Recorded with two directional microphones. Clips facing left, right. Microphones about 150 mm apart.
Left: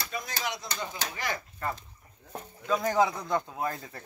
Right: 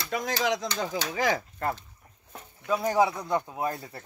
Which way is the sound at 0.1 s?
90° right.